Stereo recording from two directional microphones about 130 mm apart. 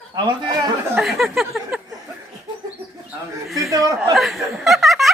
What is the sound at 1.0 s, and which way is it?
Speech, centre (ahead or behind).